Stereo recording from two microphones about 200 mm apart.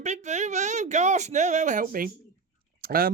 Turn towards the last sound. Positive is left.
turn(degrees=-45)  # may be behind; listen again after turning